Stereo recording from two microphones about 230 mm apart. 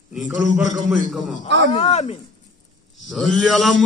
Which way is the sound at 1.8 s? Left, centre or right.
Left.